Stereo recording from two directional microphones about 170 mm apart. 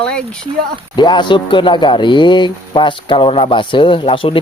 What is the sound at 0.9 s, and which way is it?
Speech, 25° left (ahead or behind).